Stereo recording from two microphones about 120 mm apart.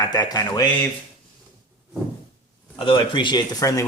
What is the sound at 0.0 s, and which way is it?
Speech, 35° left (ahead or behind).